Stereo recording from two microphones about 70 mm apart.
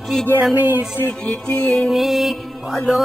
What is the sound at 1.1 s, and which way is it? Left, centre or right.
Music, centre.